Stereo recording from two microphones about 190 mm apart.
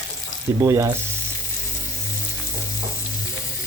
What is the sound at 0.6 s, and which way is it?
Frying, 15° right (ahead or behind).